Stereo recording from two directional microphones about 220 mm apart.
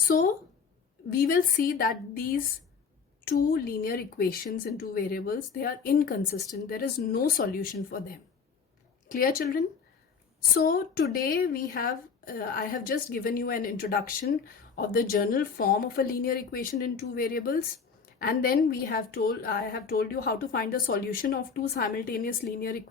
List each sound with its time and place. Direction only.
0.1 s a woman's voice: 40° left (ahead or behind)
3.4 s a woman's voice: 40° left (ahead or behind)